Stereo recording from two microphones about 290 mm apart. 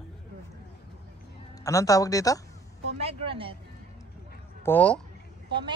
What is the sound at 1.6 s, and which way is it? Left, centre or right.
Speech, centre.